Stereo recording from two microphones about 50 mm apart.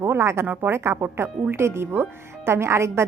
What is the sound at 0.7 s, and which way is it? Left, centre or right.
Speech, right.